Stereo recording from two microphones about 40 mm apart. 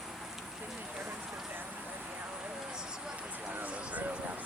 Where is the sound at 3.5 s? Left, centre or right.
Right.